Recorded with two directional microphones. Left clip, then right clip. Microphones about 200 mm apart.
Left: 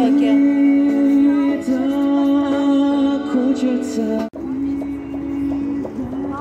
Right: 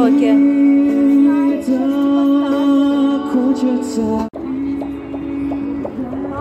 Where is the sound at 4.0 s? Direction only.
45° right (ahead or behind).